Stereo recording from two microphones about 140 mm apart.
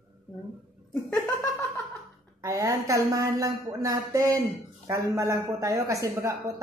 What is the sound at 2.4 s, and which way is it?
A woman's voice, 25° right (ahead or behind).